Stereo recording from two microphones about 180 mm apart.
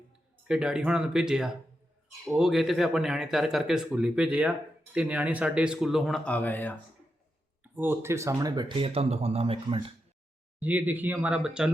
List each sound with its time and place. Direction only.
0.4 s speech: 5° right (ahead or behind)
7.6 s speech: 10° right (ahead or behind); by 9.9 s 30° right (ahead or behind)
10.6 s speech: 10° right (ahead or behind)